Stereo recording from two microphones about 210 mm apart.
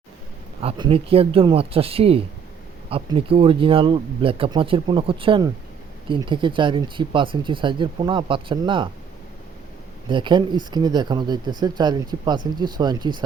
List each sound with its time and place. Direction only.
0.6 s speech: 25° right (ahead or behind)
10.1 s speech: 20° right (ahead or behind)